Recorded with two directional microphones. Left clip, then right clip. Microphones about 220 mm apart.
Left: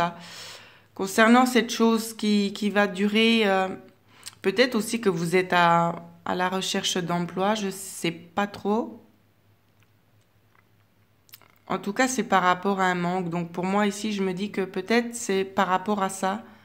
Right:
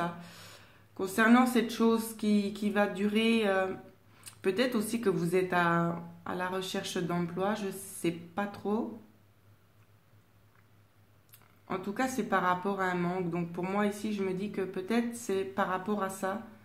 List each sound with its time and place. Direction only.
0.0 s speech: 35° left (ahead or behind)
11.3 s speech: 35° left (ahead or behind)